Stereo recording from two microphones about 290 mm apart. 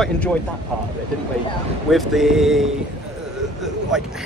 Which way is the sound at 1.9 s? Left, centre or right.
Centre.